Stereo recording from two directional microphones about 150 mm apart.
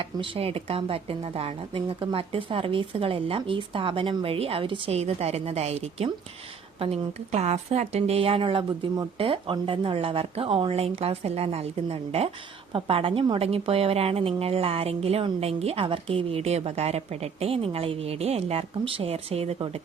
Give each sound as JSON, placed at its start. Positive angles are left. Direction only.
{"t": 0.0, "sound": "a woman's voice", "side_deg": -35}